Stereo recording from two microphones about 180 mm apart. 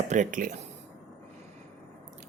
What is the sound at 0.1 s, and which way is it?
Speech, 45° right (ahead or behind).